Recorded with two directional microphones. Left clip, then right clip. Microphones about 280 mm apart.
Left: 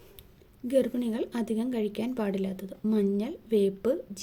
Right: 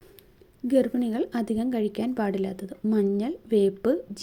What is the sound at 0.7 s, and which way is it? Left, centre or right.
A woman's voice, centre.